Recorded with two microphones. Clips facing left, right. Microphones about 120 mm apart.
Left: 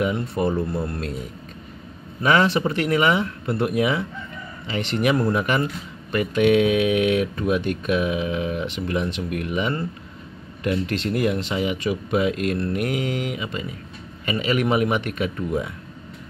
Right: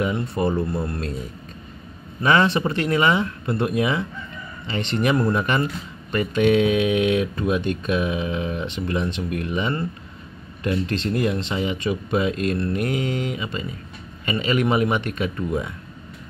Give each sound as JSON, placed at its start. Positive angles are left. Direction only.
{"t": 0.0, "sound": "speech", "side_deg": 0}
{"t": 2.2, "sound": "speech", "side_deg": 5}